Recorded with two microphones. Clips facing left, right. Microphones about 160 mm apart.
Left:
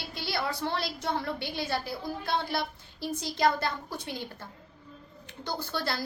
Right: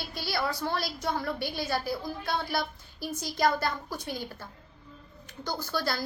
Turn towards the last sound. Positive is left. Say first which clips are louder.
# right 1 dB
turn(degrees=25)  # may be behind; listen again after turning